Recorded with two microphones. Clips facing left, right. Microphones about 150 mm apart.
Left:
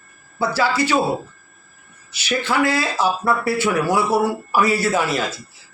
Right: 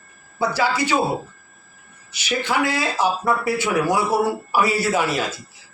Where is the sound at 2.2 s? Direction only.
15° right (ahead or behind).